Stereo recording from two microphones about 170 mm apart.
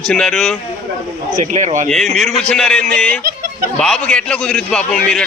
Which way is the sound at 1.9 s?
Centre (ahead or behind).